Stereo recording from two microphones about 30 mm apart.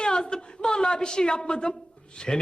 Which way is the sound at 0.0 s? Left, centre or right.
Left.